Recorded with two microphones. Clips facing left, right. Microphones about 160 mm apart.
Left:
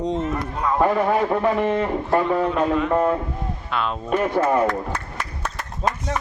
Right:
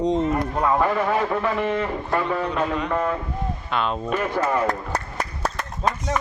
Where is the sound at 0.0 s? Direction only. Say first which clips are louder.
Right 3 dB; centre (ahead or behind).